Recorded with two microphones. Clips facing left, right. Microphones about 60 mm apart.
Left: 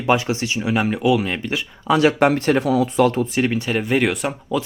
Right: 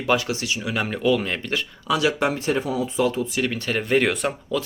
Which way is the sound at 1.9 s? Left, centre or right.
Left.